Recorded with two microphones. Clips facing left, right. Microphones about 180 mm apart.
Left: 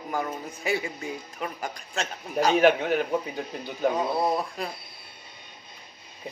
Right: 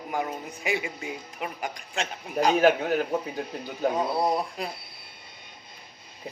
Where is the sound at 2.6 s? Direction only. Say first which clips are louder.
Left 1 dB; 40° right (ahead or behind).